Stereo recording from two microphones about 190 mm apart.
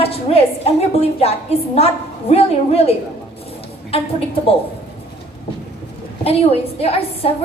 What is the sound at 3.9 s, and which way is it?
Speech, 30° left (ahead or behind).